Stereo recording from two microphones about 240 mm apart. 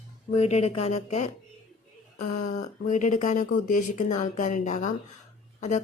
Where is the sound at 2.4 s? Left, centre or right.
Left.